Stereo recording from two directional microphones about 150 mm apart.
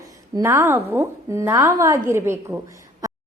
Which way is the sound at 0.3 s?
15° right (ahead or behind).